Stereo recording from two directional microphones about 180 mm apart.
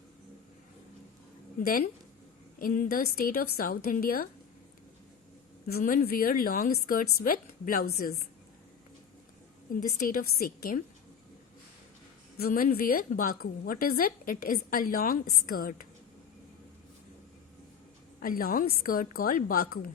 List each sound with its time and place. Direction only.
1.6 s a woman's voice: 55° left (ahead or behind)
5.6 s a woman's voice: 55° left (ahead or behind)
10.0 s a woman's voice: 55° left (ahead or behind)
12.4 s a woman's voice: 55° left (ahead or behind)
18.2 s a woman's voice: 55° left (ahead or behind)